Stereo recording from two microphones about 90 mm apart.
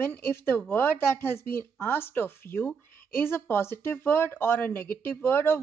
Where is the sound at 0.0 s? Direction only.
25° left (ahead or behind).